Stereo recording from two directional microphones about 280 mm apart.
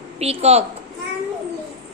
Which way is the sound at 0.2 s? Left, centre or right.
Right.